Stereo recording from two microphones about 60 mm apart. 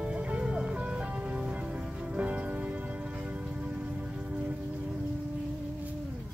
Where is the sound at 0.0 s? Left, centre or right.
Right.